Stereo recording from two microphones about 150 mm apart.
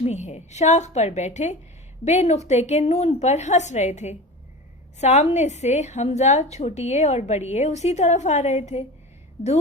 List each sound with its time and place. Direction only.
0.0 s a woman's voice: 50° left (ahead or behind)